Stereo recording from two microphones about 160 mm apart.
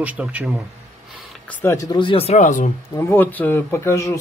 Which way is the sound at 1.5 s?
15° left (ahead or behind).